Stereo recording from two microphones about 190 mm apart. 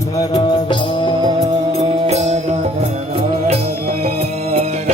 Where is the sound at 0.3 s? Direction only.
25° left (ahead or behind).